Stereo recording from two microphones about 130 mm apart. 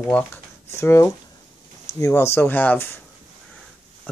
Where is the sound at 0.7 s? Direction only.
25° left (ahead or behind).